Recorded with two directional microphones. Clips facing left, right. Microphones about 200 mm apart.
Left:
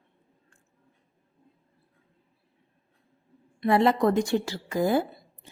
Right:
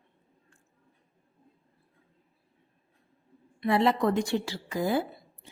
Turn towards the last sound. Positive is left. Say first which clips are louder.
# left 4 dB
turn(degrees=45)  # may be behind; listen again after turning